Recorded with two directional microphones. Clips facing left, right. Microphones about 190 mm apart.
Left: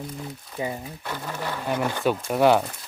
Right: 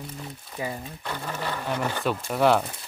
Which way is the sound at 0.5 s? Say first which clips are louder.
Left 2 dB; 20° left (ahead or behind).